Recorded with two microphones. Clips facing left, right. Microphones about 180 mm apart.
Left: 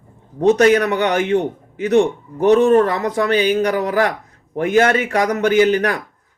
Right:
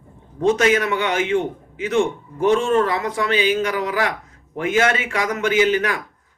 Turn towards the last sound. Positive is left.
turn(degrees=40)  # may be behind; listen again after turning